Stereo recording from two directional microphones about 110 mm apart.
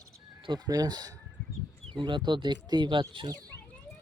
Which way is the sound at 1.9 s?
45° right (ahead or behind).